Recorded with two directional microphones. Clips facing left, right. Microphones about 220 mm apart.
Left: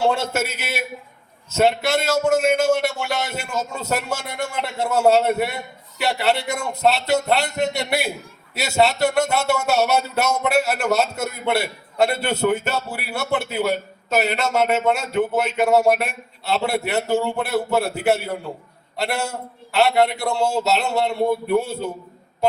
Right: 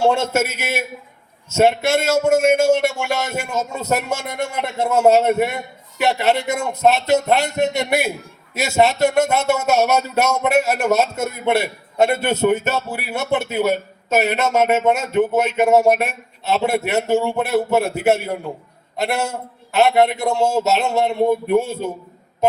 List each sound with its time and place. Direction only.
0.0 s a man's voice: 25° right (ahead or behind)
0.3 s a man's voice: 45° right (ahead or behind)
1.5 s a man's voice: 25° right (ahead or behind)